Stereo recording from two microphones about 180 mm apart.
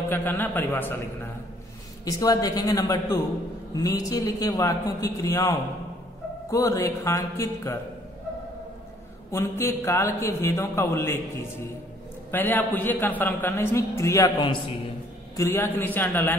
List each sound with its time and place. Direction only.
0.1 s a man's voice: 10° left (ahead or behind)
9.3 s a man's voice: 15° left (ahead or behind)
12.3 s a man's voice: 10° left (ahead or behind)